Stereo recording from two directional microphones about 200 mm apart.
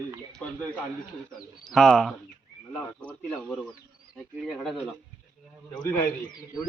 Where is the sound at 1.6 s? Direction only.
Centre (ahead or behind).